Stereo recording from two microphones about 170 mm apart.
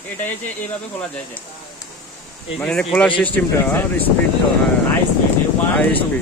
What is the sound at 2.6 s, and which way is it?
Speech, 5° left (ahead or behind).